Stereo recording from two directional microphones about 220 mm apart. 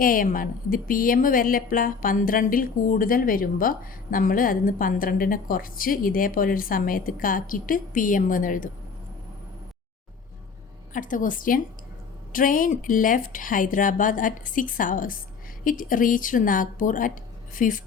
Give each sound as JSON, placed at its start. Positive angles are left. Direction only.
{"t": 0.0, "sound": "speech", "side_deg": 40}
{"t": 10.9, "sound": "speech", "side_deg": 35}